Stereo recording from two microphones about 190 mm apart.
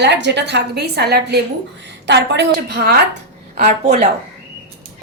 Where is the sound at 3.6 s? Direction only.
35° right (ahead or behind).